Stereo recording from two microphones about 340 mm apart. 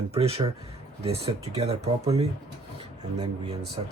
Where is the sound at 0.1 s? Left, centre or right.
Centre.